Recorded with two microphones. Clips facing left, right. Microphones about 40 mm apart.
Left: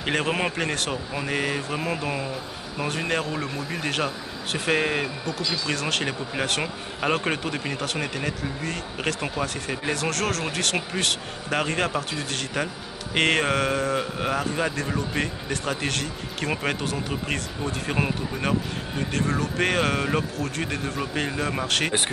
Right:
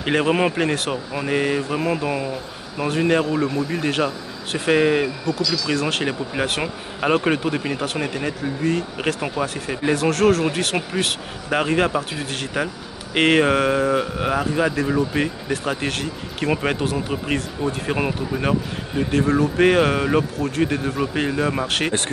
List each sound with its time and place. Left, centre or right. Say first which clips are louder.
0.0 s speech: right 6 dB; centre
5.4 s speech: right 4 dB; left
5.7 s speech: right 3 dB; centre